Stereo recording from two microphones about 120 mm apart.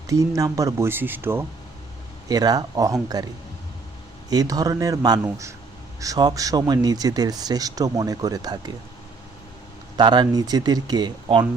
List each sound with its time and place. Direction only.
0.1 s speech: 30° right (ahead or behind)
2.2 s speech: 30° right (ahead or behind)
4.3 s speech: 30° right (ahead or behind)
10.0 s speech: 35° right (ahead or behind)